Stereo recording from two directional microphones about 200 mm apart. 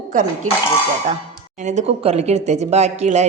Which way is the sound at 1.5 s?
35° right (ahead or behind).